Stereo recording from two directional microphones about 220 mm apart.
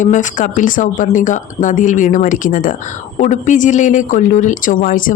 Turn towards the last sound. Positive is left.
turn(degrees=35)  # may be behind; listen again after turning